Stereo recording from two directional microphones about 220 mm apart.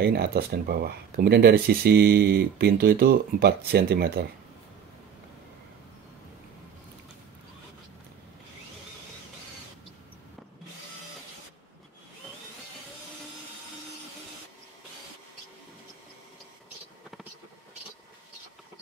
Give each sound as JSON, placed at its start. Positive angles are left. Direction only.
{"t": 0.0, "sound": "speech", "side_deg": -45}